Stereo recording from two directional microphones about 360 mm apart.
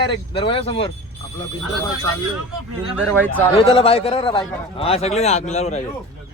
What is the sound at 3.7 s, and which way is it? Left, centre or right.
A man's voice, centre.